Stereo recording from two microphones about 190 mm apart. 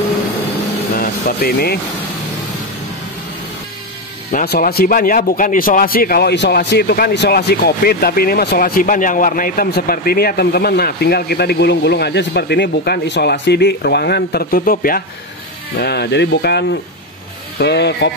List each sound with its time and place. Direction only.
0.9 s vehicle: 50° left (ahead or behind)
4.3 s a man's voice: 50° left (ahead or behind)
15.8 s a man's voice: 60° left (ahead or behind)